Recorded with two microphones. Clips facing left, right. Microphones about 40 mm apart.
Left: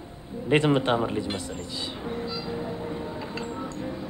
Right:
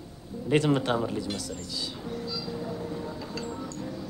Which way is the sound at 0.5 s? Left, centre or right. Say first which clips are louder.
Left 3 dB; left.